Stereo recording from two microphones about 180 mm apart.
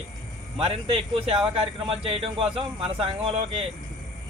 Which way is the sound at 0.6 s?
30° right (ahead or behind).